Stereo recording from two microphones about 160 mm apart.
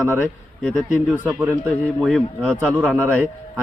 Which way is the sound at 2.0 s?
Centre (ahead or behind).